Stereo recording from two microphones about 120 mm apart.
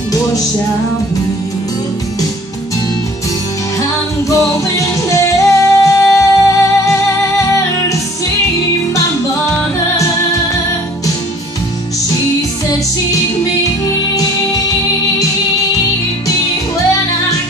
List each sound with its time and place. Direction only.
4.3 s music: 25° left (ahead or behind)